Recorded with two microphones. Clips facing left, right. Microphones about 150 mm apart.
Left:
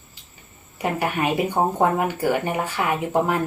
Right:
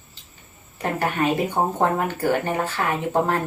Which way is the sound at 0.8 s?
10° left (ahead or behind).